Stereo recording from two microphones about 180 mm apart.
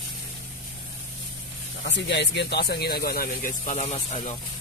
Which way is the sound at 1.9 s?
75° left (ahead or behind).